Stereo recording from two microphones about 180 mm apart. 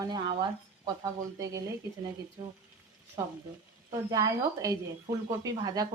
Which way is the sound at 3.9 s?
20° right (ahead or behind).